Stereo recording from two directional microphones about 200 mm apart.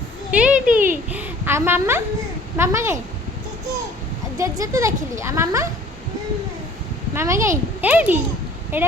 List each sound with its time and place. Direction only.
0.3 s a sound: 5° right (ahead or behind)
2.6 s speech: 15° right (ahead or behind)
4.4 s speech: 15° right (ahead or behind)
7.1 s a child's voice: 15° right (ahead or behind)